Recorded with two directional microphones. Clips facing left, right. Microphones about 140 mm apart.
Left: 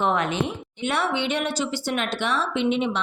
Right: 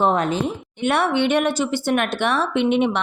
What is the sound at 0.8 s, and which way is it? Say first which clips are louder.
Speech: right 6 dB; 55° right (ahead or behind).